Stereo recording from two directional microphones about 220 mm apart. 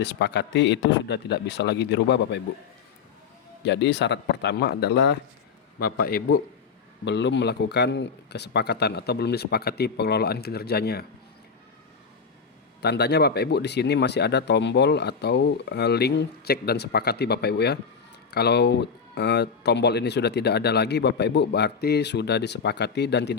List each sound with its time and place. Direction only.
0.0 s speech: 50° left (ahead or behind)
3.6 s speech: 50° left (ahead or behind)
7.0 s speech: 55° left (ahead or behind)
12.8 s speech: 50° left (ahead or behind)